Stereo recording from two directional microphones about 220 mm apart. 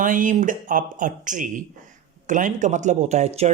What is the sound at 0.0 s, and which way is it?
Speech, 35° right (ahead or behind).